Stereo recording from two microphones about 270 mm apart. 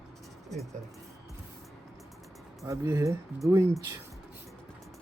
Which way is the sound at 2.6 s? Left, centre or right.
Centre.